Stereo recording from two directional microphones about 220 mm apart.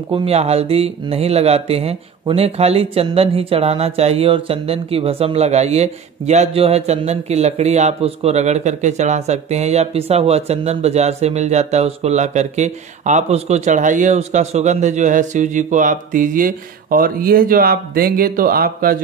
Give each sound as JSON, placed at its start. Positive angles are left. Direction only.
{"t": 0.1, "sound": "speech", "side_deg": -25}